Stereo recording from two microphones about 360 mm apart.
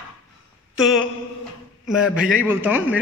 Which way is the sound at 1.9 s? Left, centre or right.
Centre.